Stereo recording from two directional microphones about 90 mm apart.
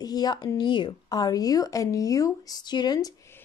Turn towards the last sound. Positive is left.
turn(degrees=50)  # may be behind; listen again after turning